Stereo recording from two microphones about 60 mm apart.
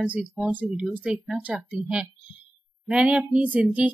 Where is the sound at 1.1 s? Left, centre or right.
Centre.